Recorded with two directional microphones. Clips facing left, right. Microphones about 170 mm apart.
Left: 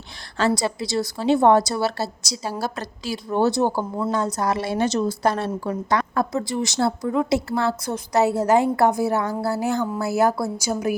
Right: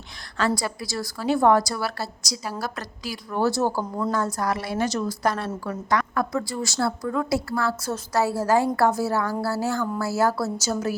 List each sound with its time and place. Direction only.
0.3 s a woman's voice: 25° left (ahead or behind)